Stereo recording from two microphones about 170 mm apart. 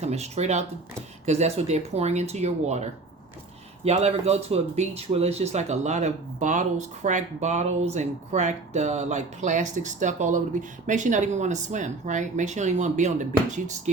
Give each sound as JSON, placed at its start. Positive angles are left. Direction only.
{"t": 0.0, "sound": "speech", "side_deg": -40}
{"t": 3.8, "sound": "speech", "side_deg": -40}